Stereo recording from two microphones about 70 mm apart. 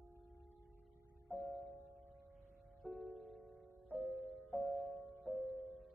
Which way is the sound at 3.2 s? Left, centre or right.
Centre.